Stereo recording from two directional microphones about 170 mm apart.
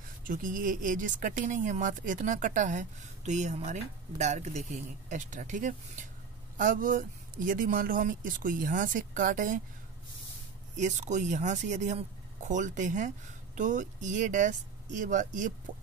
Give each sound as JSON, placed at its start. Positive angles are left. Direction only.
{"t": 0.2, "sound": "speech", "side_deg": -55}
{"t": 10.8, "sound": "speech", "side_deg": -45}